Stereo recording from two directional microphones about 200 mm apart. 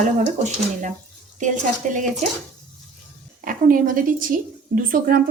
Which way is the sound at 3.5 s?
45° right (ahead or behind).